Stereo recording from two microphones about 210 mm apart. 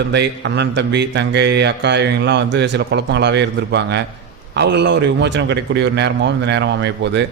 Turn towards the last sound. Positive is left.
turn(degrees=-55)  # may be behind; listen again after turning